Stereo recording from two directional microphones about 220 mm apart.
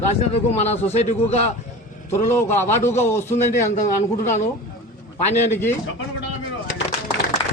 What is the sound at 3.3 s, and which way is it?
Speech, 35° left (ahead or behind).